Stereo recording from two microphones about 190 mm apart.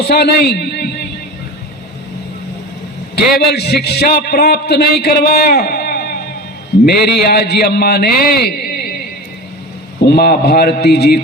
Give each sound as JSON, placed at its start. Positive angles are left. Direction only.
{"t": 0.0, "sound": "a man's voice", "side_deg": 55}
{"t": 3.5, "sound": "a man's voice", "side_deg": 60}
{"t": 10.1, "sound": "a man's voice", "side_deg": 55}